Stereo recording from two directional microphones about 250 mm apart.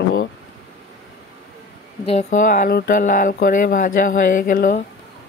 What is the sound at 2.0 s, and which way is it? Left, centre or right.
Speech, left.